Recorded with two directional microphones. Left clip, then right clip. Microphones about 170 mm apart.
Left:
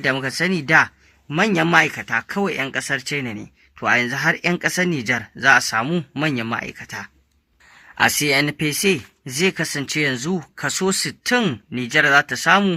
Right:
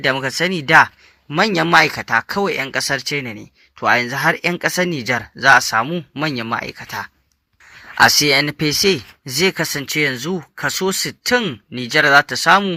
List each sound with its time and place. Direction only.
0.0 s speech: 20° right (ahead or behind)
5.8 s speech: centre (ahead or behind)
6.2 s speech: 20° right (ahead or behind)